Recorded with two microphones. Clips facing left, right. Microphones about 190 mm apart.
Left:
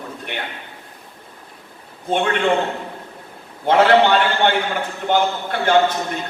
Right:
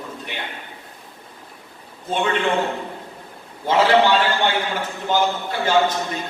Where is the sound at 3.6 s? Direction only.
60° left (ahead or behind).